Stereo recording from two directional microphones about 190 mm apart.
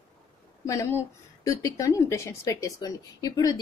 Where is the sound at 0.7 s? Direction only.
15° left (ahead or behind).